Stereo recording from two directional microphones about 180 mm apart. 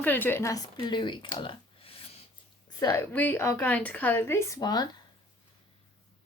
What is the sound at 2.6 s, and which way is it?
A woman's voice, 20° left (ahead or behind).